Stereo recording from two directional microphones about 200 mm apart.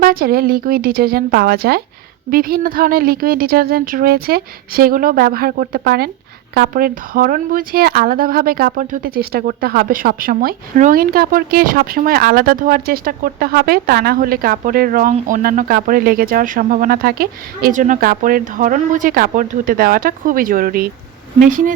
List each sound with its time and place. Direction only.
0.0 s speech: 45° right (ahead or behind)